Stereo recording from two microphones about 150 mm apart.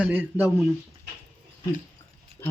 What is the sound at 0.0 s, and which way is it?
Speech, 10° right (ahead or behind).